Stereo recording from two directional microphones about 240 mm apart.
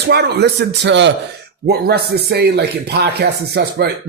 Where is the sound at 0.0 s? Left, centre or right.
Right.